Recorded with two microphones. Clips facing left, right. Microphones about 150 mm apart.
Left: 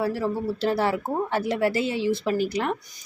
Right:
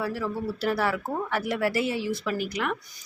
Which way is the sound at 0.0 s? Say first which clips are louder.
Left 4 dB; 30° left (ahead or behind).